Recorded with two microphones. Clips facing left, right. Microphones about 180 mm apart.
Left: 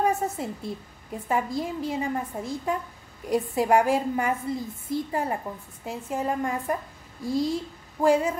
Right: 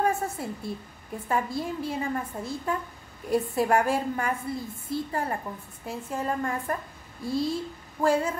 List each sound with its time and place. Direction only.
0.0 s a woman's voice: 20° left (ahead or behind)